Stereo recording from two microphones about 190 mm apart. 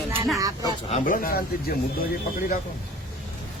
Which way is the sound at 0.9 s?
40° left (ahead or behind).